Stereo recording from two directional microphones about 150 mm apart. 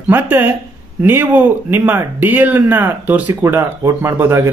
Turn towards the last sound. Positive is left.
turn(degrees=-15)  # may be behind; listen again after turning